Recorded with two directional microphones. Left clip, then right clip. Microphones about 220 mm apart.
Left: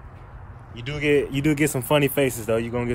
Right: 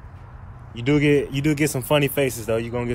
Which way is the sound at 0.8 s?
10° right (ahead or behind).